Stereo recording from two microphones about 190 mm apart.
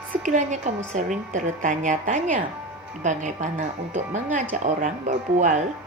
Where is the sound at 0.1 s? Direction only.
45° right (ahead or behind).